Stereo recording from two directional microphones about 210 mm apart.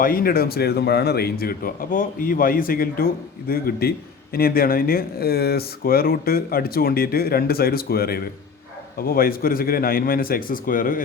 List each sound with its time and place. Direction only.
0.0 s a man's voice: 45° left (ahead or behind)